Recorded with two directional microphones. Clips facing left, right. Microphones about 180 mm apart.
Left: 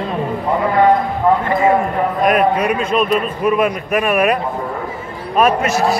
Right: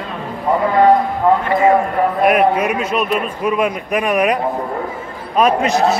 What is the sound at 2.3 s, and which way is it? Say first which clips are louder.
A man's voice: even; 10° right (ahead or behind).